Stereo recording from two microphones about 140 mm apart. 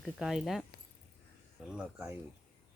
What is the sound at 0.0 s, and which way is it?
Speech, centre (ahead or behind).